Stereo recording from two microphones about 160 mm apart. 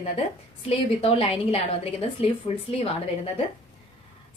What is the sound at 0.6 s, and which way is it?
A woman's voice, 40° left (ahead or behind).